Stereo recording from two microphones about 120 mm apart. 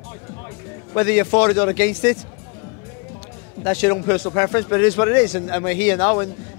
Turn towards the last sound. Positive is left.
turn(degrees=20)  # may be behind; listen again after turning